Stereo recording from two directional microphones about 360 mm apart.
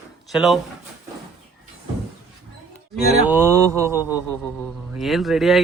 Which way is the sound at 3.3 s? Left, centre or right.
Centre.